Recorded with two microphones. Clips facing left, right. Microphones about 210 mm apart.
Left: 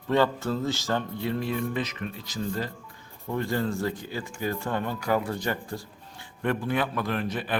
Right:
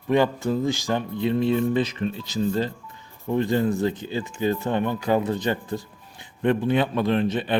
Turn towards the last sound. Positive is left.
turn(degrees=-25)  # may be behind; listen again after turning